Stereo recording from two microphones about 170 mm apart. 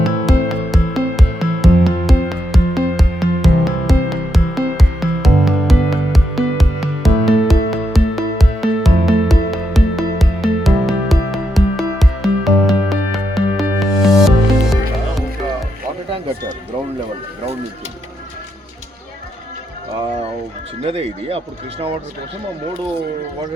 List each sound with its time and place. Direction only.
0.0 s music: centre (ahead or behind)
20.8 s run: 35° right (ahead or behind)